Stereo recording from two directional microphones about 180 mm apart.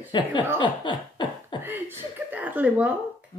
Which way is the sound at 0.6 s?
25° left (ahead or behind).